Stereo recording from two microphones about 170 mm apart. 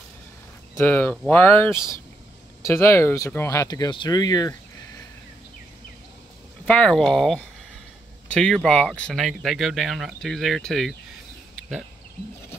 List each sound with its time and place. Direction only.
0.7 s speech: 15° left (ahead or behind)
6.6 s speech: 5° left (ahead or behind)